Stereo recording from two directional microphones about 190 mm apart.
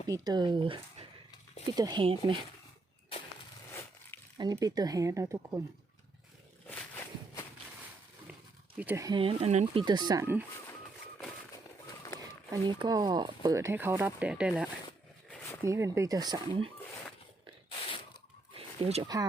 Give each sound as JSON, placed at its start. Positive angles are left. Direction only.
{"t": 0.1, "sound": "speech", "side_deg": -20}
{"t": 4.4, "sound": "speech", "side_deg": -20}
{"t": 6.7, "sound": "walk", "side_deg": 10}
{"t": 8.8, "sound": "speech", "side_deg": -10}
{"t": 9.0, "sound": "speech", "side_deg": -25}
{"t": 9.8, "sound": "speech", "side_deg": -20}
{"t": 12.5, "sound": "speech", "side_deg": -20}
{"t": 15.3, "sound": "a sound", "side_deg": 10}
{"t": 15.6, "sound": "speech", "side_deg": -15}
{"t": 18.5, "sound": "a sound", "side_deg": -35}
{"t": 19.0, "sound": "speech", "side_deg": -20}